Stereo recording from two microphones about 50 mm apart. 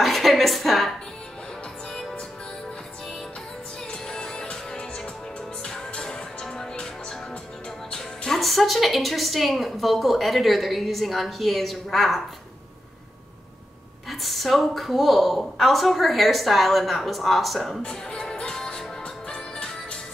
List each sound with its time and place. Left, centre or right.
0.0 s a sound: centre
4.1 s music: centre
8.4 s a woman's voice: centre
14.2 s a woman's voice: centre
17.8 s music: centre